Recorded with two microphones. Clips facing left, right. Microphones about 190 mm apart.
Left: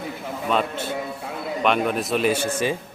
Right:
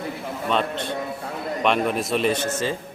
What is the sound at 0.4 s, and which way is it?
A man's voice, 5° left (ahead or behind).